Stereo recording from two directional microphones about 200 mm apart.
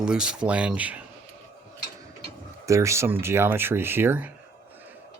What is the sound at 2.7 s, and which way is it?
Speech, 15° right (ahead or behind).